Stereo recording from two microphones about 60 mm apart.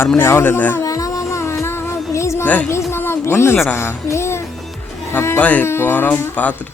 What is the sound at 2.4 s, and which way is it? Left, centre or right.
Speech, left.